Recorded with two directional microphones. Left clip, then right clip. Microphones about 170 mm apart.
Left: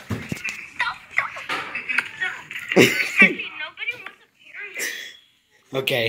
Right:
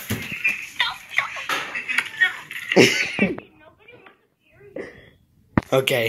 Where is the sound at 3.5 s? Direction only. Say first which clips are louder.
Left 19 dB; 60° left (ahead or behind).